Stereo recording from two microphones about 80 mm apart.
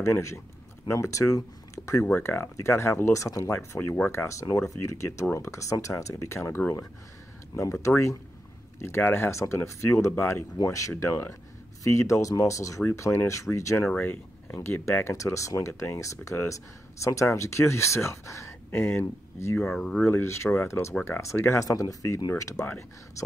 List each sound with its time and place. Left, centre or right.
0.0 s speech: left
13.8 s speech: left
19.6 s speech: centre
20.0 s speech: left